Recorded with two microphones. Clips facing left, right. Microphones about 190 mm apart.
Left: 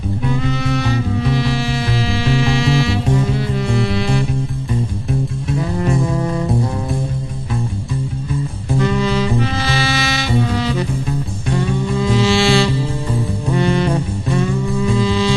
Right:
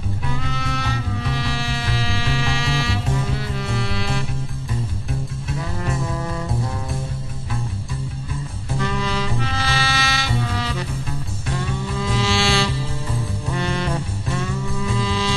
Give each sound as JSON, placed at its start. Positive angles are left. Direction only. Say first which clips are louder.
{"t": 0.5, "sound": "music", "louder": "left 8 dB", "side_deg": 0}
{"t": 0.8, "sound": "music", "louder": "left 8 dB", "side_deg": 20}
{"t": 1.3, "sound": "music", "louder": "left 8 dB", "side_deg": 0}
{"t": 3.2, "sound": "music", "louder": "left 7 dB", "side_deg": 20}
{"t": 5.8, "sound": "music", "louder": "left 8 dB", "side_deg": 15}
{"t": 8.7, "sound": "saxophone", "louder": "left 7 dB", "side_deg": 20}
{"t": 9.6, "sound": "music", "louder": "left 5 dB", "side_deg": 0}
{"t": 10.3, "sound": "music", "louder": "left 8 dB", "side_deg": 20}
{"t": 12.2, "sound": "music", "louder": "left 6 dB", "side_deg": 0}
{"t": 13.5, "sound": "music", "louder": "left 8 dB", "side_deg": 20}
{"t": 15.0, "sound": "music", "louder": "left 7 dB", "side_deg": 0}